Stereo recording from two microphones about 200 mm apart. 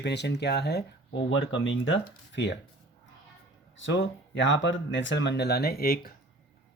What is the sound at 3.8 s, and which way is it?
Speech, 65° left (ahead or behind).